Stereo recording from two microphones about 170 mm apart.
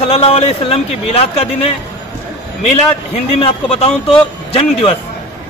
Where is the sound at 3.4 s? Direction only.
35° left (ahead or behind).